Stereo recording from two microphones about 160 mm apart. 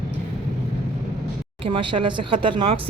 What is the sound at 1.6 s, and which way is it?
A woman's voice, 35° right (ahead or behind).